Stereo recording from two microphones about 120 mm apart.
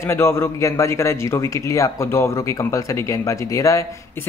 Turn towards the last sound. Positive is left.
turn(degrees=25)  # may be behind; listen again after turning